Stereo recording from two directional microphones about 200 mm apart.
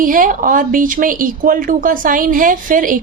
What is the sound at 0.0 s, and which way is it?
Speech, 45° right (ahead or behind).